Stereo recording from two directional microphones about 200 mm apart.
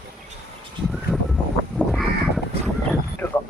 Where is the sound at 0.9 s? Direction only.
Centre (ahead or behind).